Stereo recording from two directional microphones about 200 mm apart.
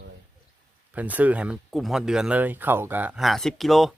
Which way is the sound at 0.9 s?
5° right (ahead or behind).